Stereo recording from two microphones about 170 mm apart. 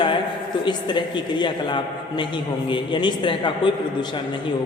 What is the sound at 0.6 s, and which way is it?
A man's voice, 25° left (ahead or behind).